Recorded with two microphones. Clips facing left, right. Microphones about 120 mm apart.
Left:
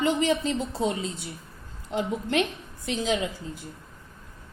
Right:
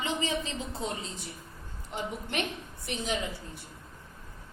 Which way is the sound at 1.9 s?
90° left.